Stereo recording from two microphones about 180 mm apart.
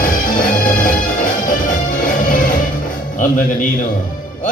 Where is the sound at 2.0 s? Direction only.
50° left (ahead or behind).